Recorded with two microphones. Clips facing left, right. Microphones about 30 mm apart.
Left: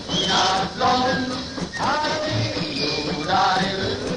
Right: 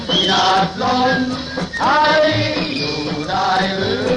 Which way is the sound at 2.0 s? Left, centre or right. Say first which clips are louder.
Right 10 dB; right.